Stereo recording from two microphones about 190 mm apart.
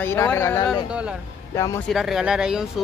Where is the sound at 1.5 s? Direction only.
15° left (ahead or behind).